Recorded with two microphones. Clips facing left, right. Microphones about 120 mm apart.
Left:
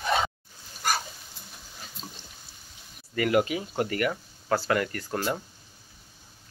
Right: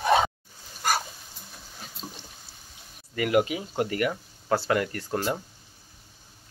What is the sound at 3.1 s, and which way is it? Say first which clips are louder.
Speech: even; 15° right (ahead or behind).